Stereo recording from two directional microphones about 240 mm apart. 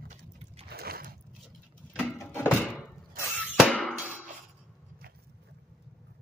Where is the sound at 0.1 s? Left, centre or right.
Right.